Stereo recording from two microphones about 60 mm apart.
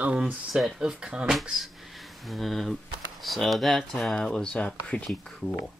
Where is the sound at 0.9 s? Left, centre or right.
Centre.